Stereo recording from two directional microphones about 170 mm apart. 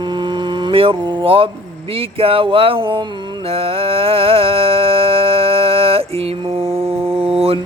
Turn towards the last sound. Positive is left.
turn(degrees=-35)  # may be behind; listen again after turning